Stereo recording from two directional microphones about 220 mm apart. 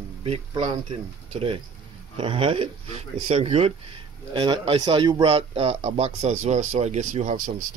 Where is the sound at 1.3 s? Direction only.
25° right (ahead or behind).